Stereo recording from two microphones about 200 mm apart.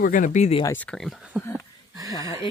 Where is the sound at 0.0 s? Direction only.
40° left (ahead or behind).